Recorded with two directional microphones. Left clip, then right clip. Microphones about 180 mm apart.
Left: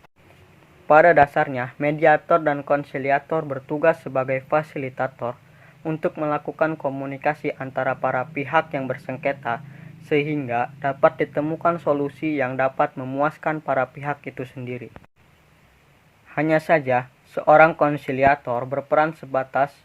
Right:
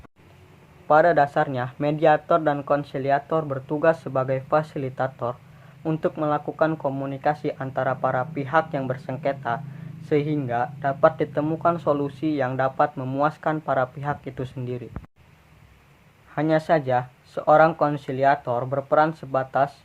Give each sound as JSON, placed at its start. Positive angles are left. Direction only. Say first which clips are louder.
{"t": 0.9, "sound": "speech", "louder": "left 4 dB", "side_deg": 30}
{"t": 16.3, "sound": "speech", "louder": "left 2 dB", "side_deg": 35}